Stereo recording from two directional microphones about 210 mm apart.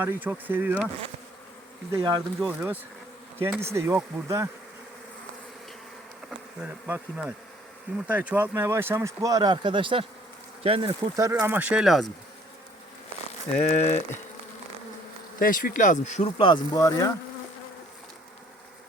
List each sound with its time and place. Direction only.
0.0 s speech: 10° right (ahead or behind)
1.9 s speech: 15° right (ahead or behind)
6.6 s speech: 10° right (ahead or behind)
13.6 s speech: 35° left (ahead or behind)
15.4 s speech: 45° left (ahead or behind); by 17.1 s 15° left (ahead or behind)